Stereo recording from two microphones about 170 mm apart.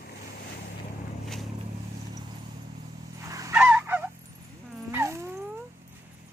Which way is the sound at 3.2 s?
20° right (ahead or behind).